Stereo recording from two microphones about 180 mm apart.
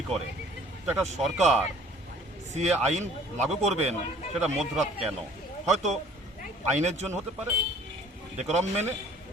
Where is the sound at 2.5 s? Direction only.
40° right (ahead or behind).